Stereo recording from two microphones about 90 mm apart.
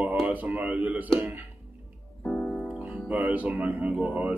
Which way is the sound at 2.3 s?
20° left (ahead or behind).